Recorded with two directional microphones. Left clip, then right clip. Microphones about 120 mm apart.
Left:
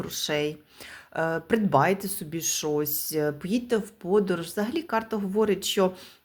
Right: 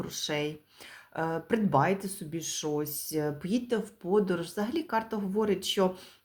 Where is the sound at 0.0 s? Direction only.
25° left (ahead or behind).